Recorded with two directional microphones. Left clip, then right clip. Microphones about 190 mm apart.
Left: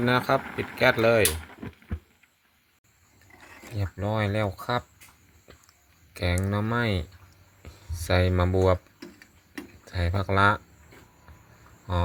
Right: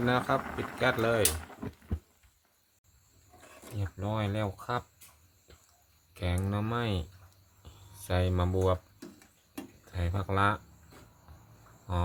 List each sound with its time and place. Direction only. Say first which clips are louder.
0.0 s speech: left 5 dB; 20° left (ahead or behind)
3.8 s speech: left 6 dB; 30° left (ahead or behind)
6.1 s speech: left 7 dB; 25° left (ahead or behind)
8.0 s speech: left 7 dB; 25° left (ahead or behind)
9.8 s speech: left 8 dB; 25° left (ahead or behind)